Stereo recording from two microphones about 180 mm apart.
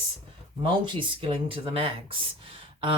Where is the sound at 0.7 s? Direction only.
30° right (ahead or behind).